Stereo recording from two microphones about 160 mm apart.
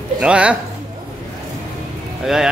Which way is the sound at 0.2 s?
5° right (ahead or behind).